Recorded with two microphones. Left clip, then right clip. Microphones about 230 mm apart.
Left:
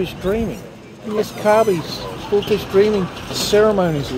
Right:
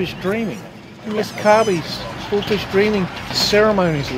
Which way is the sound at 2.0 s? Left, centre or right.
Centre.